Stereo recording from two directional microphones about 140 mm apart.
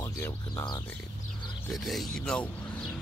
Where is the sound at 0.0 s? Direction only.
25° left (ahead or behind).